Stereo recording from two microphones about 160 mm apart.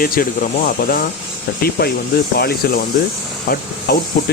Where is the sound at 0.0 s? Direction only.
65° left (ahead or behind).